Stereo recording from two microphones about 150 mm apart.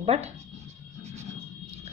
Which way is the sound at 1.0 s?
45° right (ahead or behind).